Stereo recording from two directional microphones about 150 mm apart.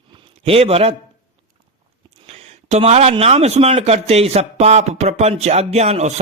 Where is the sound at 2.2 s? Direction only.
50° right (ahead or behind).